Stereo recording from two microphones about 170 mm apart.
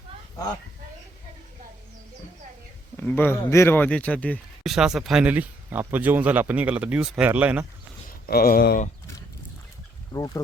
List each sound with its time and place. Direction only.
3.0 s speech: 10° left (ahead or behind)
4.7 s speech: centre (ahead or behind)
8.3 s speech: 60° left (ahead or behind)
10.1 s speech: 20° left (ahead or behind)